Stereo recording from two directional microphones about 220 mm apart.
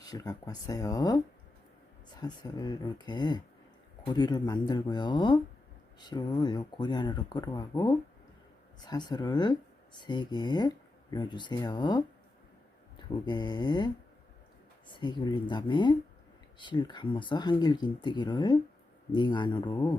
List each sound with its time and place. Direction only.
0.1 s speech: 15° left (ahead or behind)
2.2 s speech: 20° left (ahead or behind)
14.9 s speech: 20° left (ahead or behind)